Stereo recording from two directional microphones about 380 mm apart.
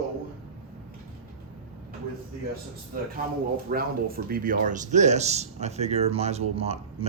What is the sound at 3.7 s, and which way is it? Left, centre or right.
Speech, right.